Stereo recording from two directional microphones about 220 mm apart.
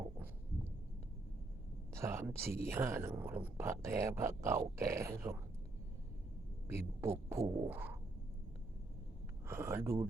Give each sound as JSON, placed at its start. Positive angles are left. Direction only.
{"t": 1.9, "sound": "speech", "side_deg": -10}
{"t": 6.7, "sound": "speech", "side_deg": -10}
{"t": 7.7, "sound": "a sound", "side_deg": -10}
{"t": 9.5, "sound": "speech", "side_deg": -10}